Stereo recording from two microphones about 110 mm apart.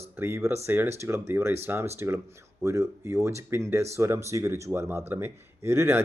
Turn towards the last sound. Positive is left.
turn(degrees=-25)  # may be behind; listen again after turning